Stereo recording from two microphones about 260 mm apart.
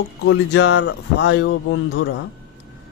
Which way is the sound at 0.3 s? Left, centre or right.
Left.